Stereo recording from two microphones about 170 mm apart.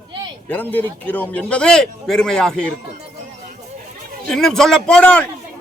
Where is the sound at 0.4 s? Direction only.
10° left (ahead or behind).